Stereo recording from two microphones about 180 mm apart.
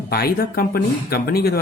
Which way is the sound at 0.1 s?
55° left (ahead or behind).